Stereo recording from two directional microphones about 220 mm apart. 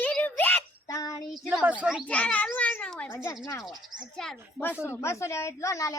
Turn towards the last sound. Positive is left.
turn(degrees=15)  # may be behind; listen again after turning